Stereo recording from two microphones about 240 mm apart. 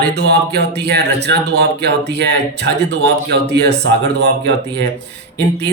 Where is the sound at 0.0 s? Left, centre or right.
Right.